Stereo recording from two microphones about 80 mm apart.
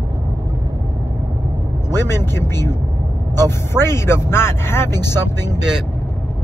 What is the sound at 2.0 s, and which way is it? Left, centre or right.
Speech, left.